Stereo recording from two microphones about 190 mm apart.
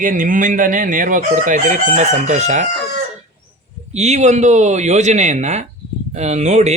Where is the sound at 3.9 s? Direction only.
35° right (ahead or behind).